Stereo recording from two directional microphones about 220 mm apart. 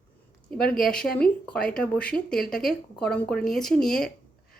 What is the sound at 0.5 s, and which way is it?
Speech, 5° left (ahead or behind).